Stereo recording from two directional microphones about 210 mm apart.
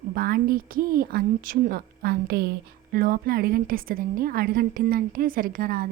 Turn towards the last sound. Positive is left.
turn(degrees=-45)  # may be behind; listen again after turning